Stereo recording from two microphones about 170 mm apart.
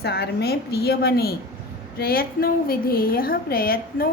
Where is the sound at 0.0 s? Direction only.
70° left (ahead or behind).